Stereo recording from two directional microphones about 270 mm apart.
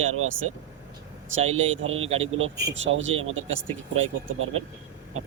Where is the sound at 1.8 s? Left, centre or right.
Right.